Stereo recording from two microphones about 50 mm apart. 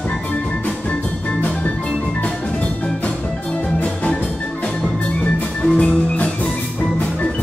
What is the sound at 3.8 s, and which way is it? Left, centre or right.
Music, left.